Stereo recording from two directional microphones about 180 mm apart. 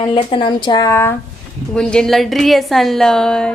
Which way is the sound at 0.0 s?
30° left (ahead or behind).